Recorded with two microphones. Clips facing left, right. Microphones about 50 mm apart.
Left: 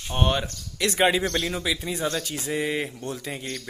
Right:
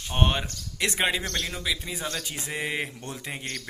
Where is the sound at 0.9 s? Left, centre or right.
Centre.